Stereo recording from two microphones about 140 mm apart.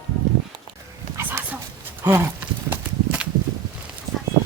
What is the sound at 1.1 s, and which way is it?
Dog, 15° right (ahead or behind).